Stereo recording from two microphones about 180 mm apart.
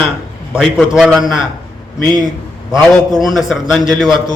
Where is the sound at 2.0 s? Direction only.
25° right (ahead or behind).